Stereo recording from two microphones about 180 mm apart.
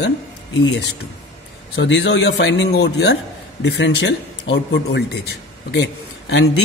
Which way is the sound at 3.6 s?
85° left.